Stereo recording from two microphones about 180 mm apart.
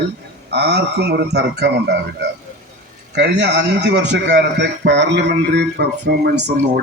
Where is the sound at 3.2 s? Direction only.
70° right (ahead or behind).